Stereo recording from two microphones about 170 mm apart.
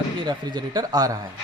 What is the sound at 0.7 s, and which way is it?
Speech, 20° right (ahead or behind).